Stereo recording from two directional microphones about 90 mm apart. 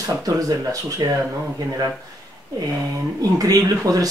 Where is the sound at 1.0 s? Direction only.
50° right (ahead or behind).